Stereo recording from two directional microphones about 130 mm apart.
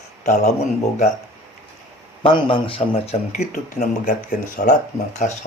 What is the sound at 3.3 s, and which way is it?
Speech, 70° left (ahead or behind).